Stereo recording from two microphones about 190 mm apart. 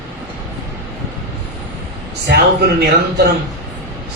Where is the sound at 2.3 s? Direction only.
55° right (ahead or behind).